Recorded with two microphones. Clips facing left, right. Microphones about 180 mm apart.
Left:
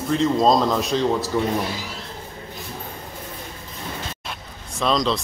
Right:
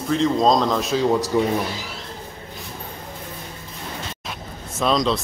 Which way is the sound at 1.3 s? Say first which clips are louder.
Right 3 dB; 15° right (ahead or behind).